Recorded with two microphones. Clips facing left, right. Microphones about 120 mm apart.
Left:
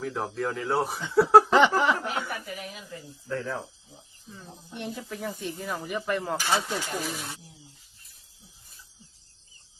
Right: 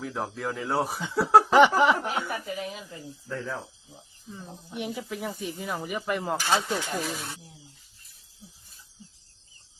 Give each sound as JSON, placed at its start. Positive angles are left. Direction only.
{"t": 0.0, "sound": "speech", "side_deg": 0}
{"t": 1.5, "sound": "snicker", "side_deg": -15}
{"t": 3.2, "sound": "speech", "side_deg": 0}
{"t": 4.7, "sound": "speech", "side_deg": -10}